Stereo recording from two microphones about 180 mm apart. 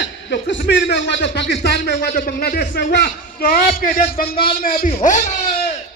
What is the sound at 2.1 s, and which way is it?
A man's voice, 50° left (ahead or behind).